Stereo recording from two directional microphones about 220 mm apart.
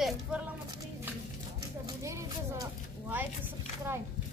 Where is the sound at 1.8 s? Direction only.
15° right (ahead or behind).